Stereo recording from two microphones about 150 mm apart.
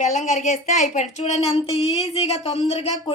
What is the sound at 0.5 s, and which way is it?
Speech, centre (ahead or behind).